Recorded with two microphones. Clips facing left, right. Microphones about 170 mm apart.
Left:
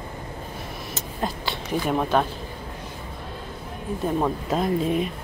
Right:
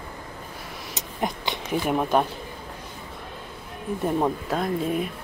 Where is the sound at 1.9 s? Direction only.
10° right (ahead or behind).